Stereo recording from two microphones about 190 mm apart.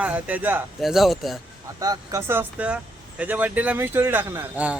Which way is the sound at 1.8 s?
20° right (ahead or behind).